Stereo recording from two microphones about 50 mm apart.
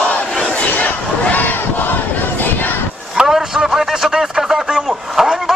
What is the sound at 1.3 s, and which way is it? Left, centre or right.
Battle cry, left.